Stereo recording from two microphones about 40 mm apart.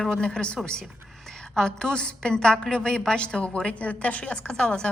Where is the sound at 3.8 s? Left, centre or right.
Left.